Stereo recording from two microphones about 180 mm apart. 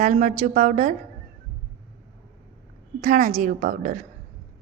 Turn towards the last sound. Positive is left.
turn(degrees=-50)  # may be behind; listen again after turning